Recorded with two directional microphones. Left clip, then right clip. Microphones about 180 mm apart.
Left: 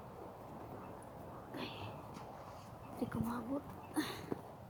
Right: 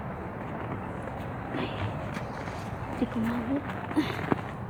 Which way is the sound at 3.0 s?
15° left (ahead or behind).